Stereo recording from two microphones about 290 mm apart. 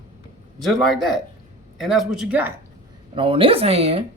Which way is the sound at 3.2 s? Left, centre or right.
Centre.